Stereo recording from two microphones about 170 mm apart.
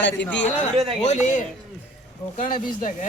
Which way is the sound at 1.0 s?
45° left (ahead or behind).